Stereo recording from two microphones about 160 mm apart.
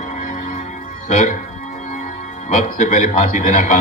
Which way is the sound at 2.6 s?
55° left (ahead or behind).